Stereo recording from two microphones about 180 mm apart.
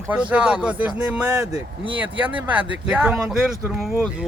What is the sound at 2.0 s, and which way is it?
Speech, 10° right (ahead or behind).